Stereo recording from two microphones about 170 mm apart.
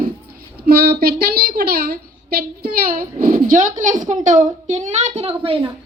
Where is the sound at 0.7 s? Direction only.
65° right (ahead or behind).